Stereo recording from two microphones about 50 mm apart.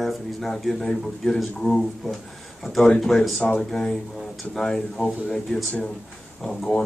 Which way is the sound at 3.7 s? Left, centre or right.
Centre.